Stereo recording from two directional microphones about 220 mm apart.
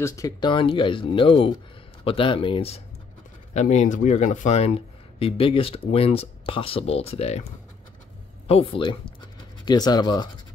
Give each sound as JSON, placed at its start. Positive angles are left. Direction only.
{"t": 0.0, "sound": "speech", "side_deg": 15}
{"t": 8.5, "sound": "speech", "side_deg": 25}